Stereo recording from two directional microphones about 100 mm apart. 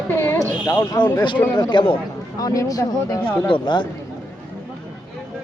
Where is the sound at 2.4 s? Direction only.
35° left (ahead or behind).